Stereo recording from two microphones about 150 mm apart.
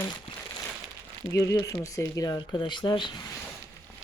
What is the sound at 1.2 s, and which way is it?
Speech, 20° left (ahead or behind).